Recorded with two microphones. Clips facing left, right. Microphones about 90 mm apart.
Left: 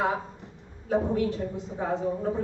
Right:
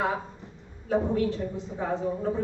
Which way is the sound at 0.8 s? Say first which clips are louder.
Even; 20° left (ahead or behind).